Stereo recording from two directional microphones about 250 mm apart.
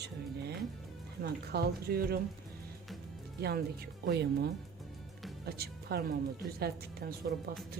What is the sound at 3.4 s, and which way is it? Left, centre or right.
A woman's voice, right.